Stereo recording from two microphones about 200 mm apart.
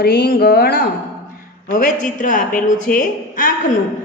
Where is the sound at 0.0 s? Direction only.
50° left (ahead or behind).